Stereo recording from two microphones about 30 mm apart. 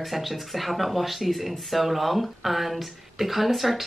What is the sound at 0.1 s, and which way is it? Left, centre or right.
Speech, centre.